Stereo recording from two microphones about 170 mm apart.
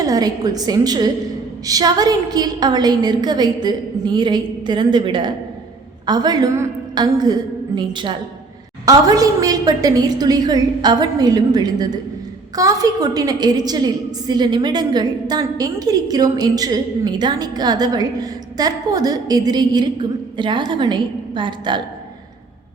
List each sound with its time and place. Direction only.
0.0 s a woman's voice: 20° right (ahead or behind)